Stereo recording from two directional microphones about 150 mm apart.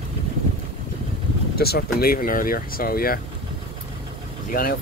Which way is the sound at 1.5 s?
90° left.